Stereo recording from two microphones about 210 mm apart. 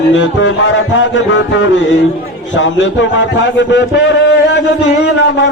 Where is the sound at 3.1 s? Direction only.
60° left (ahead or behind).